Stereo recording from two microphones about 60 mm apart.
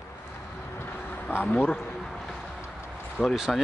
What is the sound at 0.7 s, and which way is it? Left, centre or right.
Vehicle, left.